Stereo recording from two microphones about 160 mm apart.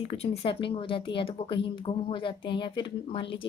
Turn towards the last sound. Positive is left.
turn(degrees=35)  # may be behind; listen again after turning